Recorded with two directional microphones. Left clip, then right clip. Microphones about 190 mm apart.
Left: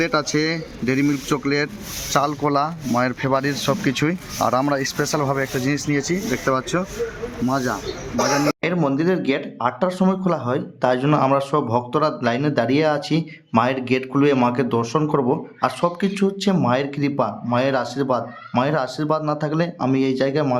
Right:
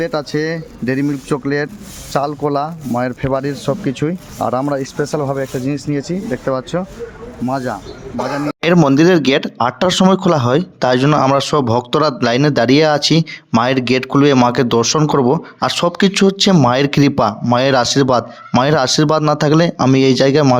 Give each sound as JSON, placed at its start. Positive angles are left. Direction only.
{"t": 0.0, "sound": "speech", "side_deg": -25}
{"t": 2.1, "sound": "speech", "side_deg": -25}
{"t": 8.1, "sound": "a man's voice", "side_deg": 50}
{"t": 8.8, "sound": "speech", "side_deg": -40}